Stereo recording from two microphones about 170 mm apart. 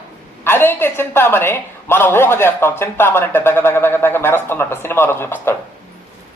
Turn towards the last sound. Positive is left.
turn(degrees=15)  # may be behind; listen again after turning